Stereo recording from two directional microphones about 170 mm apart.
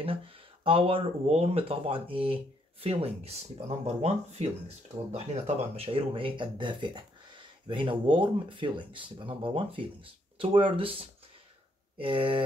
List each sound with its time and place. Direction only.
0.0 s speech: 30° right (ahead or behind)